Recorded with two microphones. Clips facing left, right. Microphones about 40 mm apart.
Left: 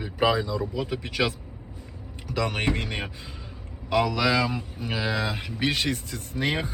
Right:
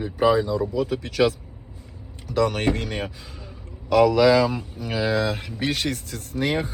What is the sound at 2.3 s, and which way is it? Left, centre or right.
Speech, left.